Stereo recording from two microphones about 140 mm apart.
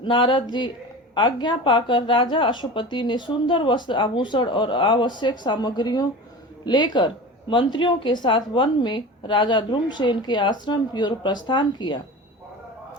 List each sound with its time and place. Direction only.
0.0 s speech: 35° left (ahead or behind)